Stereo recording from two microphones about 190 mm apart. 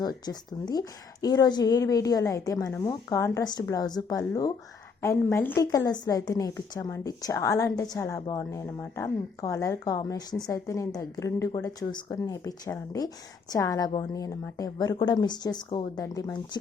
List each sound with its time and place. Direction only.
0.0 s a woman's voice: 20° left (ahead or behind)